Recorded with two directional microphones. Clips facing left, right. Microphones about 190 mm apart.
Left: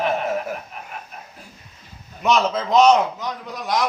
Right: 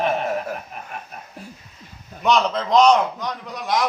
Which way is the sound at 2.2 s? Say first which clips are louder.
Even; 5° left (ahead or behind).